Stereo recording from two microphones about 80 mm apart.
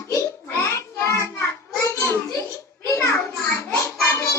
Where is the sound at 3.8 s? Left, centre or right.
Left.